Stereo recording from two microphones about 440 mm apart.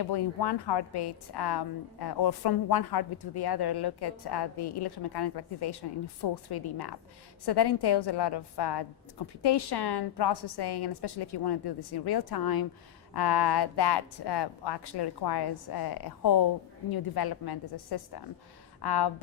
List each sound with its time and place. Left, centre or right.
0.0 s a woman's voice: left